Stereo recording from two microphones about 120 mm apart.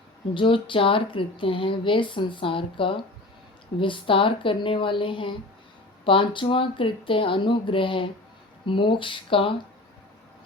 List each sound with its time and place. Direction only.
0.3 s speech: 45° left (ahead or behind)